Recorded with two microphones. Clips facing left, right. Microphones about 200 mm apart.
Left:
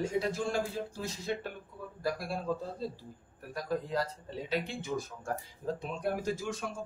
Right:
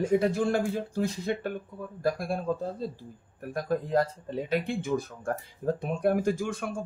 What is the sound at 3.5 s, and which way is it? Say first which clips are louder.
Speech: right 6 dB; 50° right (ahead or behind).